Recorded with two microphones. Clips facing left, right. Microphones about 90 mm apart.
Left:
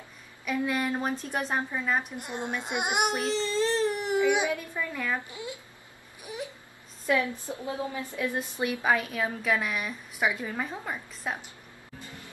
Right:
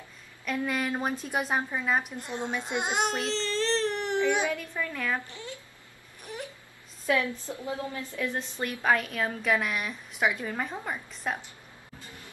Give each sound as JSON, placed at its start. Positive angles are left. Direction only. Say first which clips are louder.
{"t": 0.5, "sound": "a woman's voice", "louder": "left 1 dB", "side_deg": 0}
{"t": 2.1, "sound": "speech", "louder": "right 1 dB", "side_deg": 15}
{"t": 6.3, "sound": "wail", "louder": "left 2 dB", "side_deg": 10}
{"t": 7.2, "sound": "a woman's voice", "louder": "even", "side_deg": 20}